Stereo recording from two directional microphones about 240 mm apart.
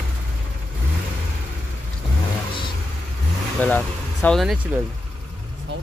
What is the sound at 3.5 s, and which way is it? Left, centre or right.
Speech, centre.